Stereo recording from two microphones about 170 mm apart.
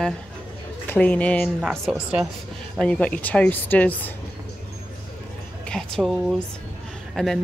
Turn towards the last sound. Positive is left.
turn(degrees=5)  # may be behind; listen again after turning